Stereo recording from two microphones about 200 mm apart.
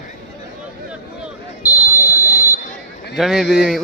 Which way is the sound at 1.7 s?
20° left (ahead or behind).